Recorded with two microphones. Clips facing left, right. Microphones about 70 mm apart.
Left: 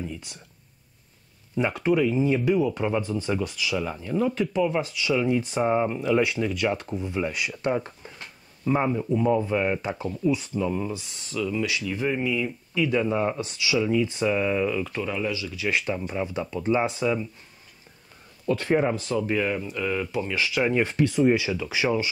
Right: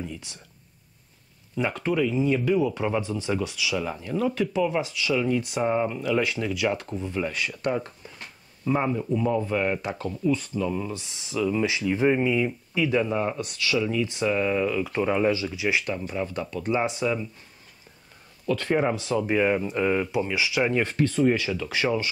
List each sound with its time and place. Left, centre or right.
0.0 s whispering: centre
1.5 s speech: centre
7.6 s speech: left
8.6 s speech: centre
11.0 s speech: centre
12.7 s speech: centre
13.0 s speech: centre
15.0 s speech: right
15.8 s speech: centre
16.6 s speech: centre
18.8 s speech: centre; by 20.1 s right
20.1 s speech: centre
20.8 s speech: centre